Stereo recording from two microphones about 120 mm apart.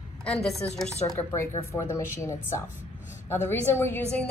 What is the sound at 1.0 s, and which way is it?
Speech, 20° left (ahead or behind).